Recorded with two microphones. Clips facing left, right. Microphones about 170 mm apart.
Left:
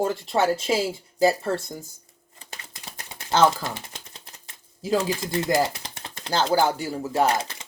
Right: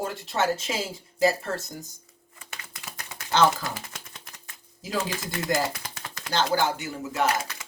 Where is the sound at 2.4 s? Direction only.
30° left (ahead or behind).